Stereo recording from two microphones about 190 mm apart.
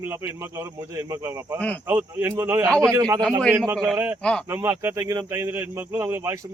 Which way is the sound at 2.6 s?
5° left (ahead or behind).